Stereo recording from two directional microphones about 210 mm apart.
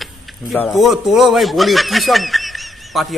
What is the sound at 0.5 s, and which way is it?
Speech, 5° left (ahead or behind).